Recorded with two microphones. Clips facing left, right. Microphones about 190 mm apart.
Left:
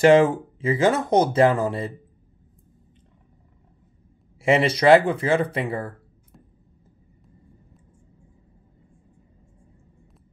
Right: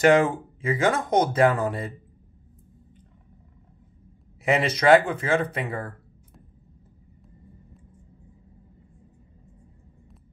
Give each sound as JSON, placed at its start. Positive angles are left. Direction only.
{"t": 0.0, "sound": "speech", "side_deg": 25}
{"t": 4.4, "sound": "speech", "side_deg": 30}